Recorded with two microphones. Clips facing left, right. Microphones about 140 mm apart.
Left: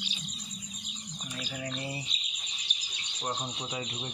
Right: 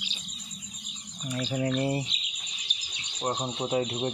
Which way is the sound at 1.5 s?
55° right (ahead or behind).